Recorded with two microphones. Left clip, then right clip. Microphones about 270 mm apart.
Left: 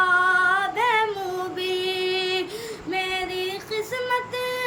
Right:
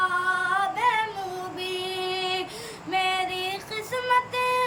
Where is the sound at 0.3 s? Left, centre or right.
Centre.